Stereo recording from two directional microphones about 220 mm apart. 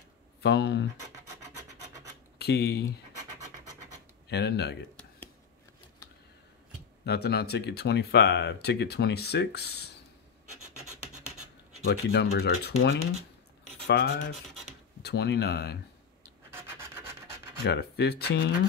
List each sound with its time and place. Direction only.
0.4 s speech: 50° left (ahead or behind)
2.4 s speech: 50° left (ahead or behind)
3.1 s scratch: 35° right (ahead or behind)
4.3 s speech: 50° left (ahead or behind)
7.1 s speech: 50° left (ahead or behind)
11.8 s speech: 50° left (ahead or behind)
17.6 s speech: 50° left (ahead or behind)